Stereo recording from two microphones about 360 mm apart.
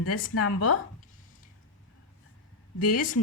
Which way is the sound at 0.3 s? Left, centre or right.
Left.